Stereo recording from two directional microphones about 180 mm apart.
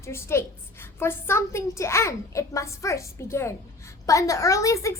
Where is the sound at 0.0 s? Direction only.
15° left (ahead or behind).